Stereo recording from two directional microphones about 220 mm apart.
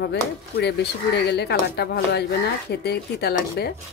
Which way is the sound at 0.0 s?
50° left (ahead or behind).